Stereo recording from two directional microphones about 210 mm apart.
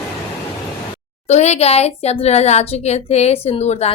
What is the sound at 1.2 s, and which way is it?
Speech, 30° left (ahead or behind).